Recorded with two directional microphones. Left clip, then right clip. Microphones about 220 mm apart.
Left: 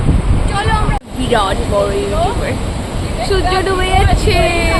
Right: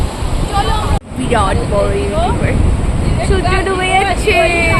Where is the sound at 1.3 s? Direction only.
Centre (ahead or behind).